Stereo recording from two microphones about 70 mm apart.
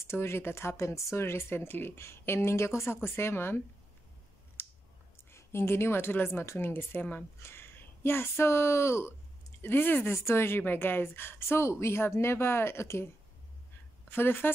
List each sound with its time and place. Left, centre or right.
0.0 s speech: left
4.6 s clicking: left
5.3 s a woman's voice: left
7.3 s speech: left
14.1 s speech: left